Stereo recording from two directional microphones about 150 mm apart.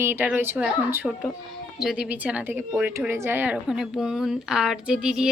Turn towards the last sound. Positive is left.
turn(degrees=-5)  # may be behind; listen again after turning